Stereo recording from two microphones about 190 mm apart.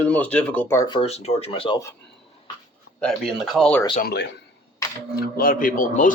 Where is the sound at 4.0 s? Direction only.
55° left (ahead or behind).